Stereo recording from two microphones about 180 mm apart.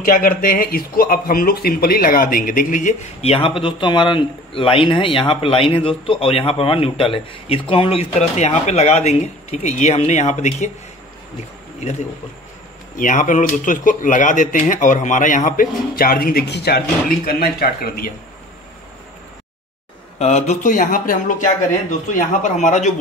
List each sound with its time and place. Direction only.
0.0 s speech: 50° left (ahead or behind)
12.9 s speech: 50° left (ahead or behind)
20.2 s speech: 35° left (ahead or behind)